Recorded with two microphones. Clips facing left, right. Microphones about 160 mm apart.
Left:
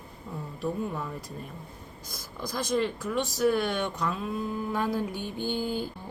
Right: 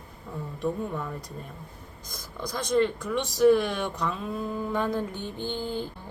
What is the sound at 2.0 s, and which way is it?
Speech, 10° left (ahead or behind).